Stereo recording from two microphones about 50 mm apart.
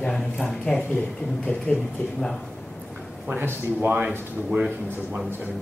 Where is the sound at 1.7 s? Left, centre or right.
Left.